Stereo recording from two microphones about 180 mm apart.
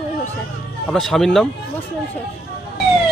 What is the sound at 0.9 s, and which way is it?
Speech, centre (ahead or behind).